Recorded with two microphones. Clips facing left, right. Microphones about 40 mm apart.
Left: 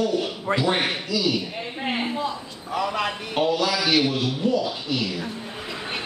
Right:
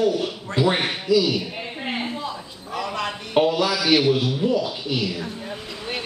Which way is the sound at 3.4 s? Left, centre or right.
Centre.